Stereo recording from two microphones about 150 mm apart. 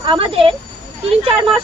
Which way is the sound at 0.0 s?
35° right (ahead or behind).